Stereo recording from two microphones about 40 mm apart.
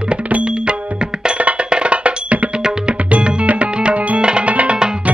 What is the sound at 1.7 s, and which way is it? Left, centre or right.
Music, right.